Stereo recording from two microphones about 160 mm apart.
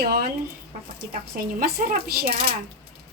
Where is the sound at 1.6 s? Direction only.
70° right (ahead or behind).